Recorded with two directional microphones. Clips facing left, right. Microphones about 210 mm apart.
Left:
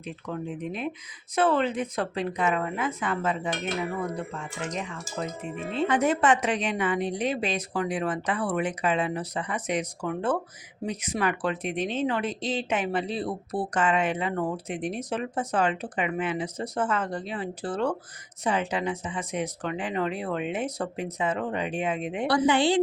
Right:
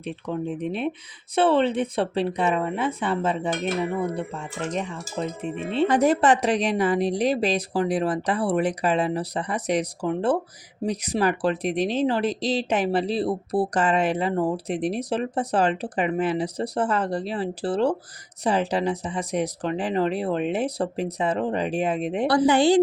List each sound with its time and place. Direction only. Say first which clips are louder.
0.0 s speech: right 5 dB; 30° right (ahead or behind)